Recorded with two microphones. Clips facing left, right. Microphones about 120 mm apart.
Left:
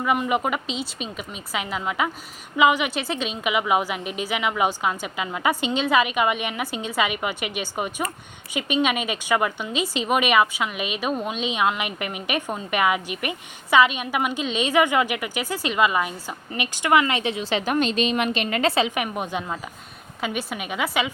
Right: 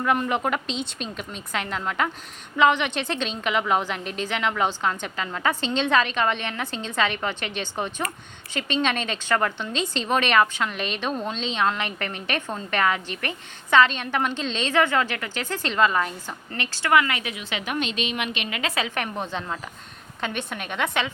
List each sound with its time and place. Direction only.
0.0 s a woman's voice: 5° left (ahead or behind); by 18.8 s 35° left (ahead or behind)
18.8 s a woman's voice: 10° left (ahead or behind)